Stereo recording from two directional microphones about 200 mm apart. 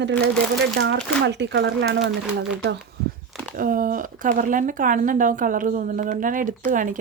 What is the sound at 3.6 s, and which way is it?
Speech, 45° right (ahead or behind).